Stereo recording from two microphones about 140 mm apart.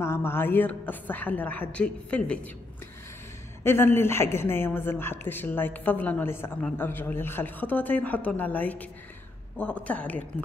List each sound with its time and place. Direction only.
0.0 s a woman's voice: 15° left (ahead or behind)
3.6 s a woman's voice: 15° left (ahead or behind)